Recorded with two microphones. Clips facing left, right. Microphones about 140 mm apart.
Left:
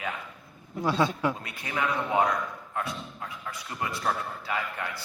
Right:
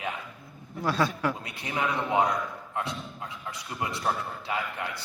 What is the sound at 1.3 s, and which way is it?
A man's voice, 20° right (ahead or behind).